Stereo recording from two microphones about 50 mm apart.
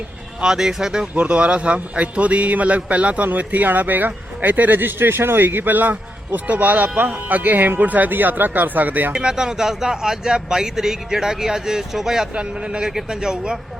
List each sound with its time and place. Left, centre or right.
0.4 s speech: centre
1.1 s a man's voice: right
9.1 s speech: centre
12.3 s a man's voice: right